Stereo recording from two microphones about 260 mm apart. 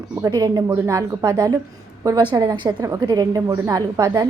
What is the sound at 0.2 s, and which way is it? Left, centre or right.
A woman's voice, centre.